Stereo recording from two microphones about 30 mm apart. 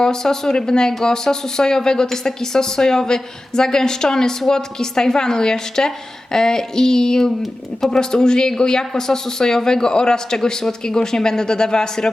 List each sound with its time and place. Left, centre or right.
0.0 s speech: centre